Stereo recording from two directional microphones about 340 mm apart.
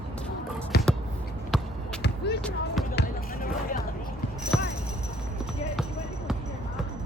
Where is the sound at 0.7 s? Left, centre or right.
Left.